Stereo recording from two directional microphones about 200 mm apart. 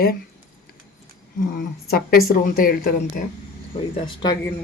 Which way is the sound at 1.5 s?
50° left (ahead or behind).